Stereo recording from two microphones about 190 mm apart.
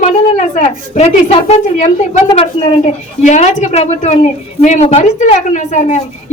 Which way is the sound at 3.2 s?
40° left (ahead or behind).